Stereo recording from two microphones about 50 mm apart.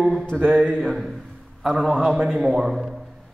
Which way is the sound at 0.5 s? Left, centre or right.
Centre.